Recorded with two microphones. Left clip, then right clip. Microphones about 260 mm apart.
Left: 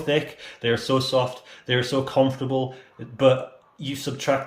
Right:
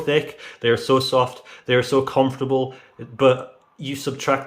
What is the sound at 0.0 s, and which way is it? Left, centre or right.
Speech, centre.